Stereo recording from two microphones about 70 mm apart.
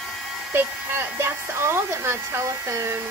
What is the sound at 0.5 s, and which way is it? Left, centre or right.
Speech, right.